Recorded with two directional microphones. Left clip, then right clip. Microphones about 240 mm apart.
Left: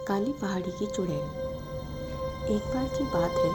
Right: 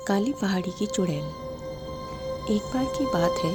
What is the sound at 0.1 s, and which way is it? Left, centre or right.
Speech, right.